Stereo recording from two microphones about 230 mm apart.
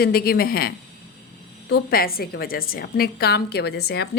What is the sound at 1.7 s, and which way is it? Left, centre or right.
A woman's voice, left.